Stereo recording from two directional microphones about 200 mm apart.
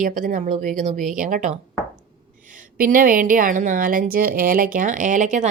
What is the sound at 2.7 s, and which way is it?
Speech, 45° right (ahead or behind).